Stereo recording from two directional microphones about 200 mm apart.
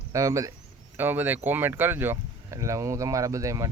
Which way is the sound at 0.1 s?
15° right (ahead or behind).